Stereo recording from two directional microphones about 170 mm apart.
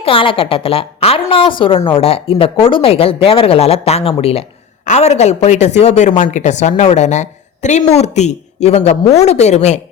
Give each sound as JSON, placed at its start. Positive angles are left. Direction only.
{"t": 0.0, "sound": "speech", "side_deg": 30}